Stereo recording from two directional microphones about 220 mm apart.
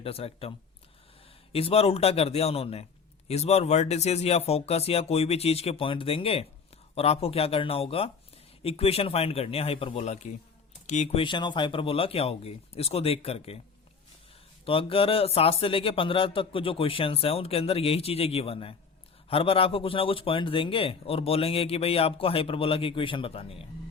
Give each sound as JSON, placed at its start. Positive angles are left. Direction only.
{"t": 0.0, "sound": "a man's voice", "side_deg": 25}
{"t": 1.5, "sound": "a man's voice", "side_deg": 25}
{"t": 14.6, "sound": "a man's voice", "side_deg": 25}